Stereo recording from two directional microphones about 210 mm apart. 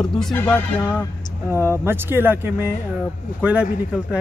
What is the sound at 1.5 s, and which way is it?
Speech, 10° right (ahead or behind).